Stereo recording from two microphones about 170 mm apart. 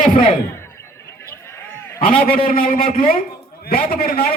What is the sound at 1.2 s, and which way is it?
Goat, 15° left (ahead or behind).